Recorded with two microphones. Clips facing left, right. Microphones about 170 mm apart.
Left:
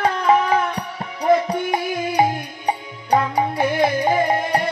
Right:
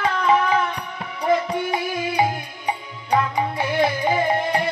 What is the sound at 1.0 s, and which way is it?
Music, 40° left (ahead or behind).